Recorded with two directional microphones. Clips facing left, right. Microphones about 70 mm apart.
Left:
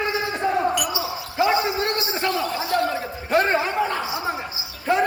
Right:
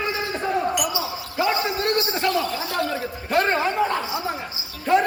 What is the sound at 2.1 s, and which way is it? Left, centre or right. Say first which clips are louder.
A man's voice: right 1 dB; centre.